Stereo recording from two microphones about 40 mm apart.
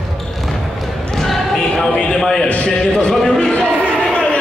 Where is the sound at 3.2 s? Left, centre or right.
Centre.